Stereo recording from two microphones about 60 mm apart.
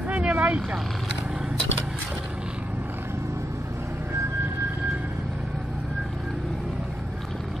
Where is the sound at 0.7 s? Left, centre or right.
Centre.